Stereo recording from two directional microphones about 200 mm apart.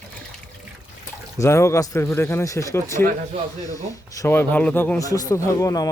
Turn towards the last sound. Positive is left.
turn(degrees=15)  # may be behind; listen again after turning